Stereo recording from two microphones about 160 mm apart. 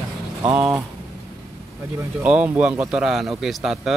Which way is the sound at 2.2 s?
10° right (ahead or behind).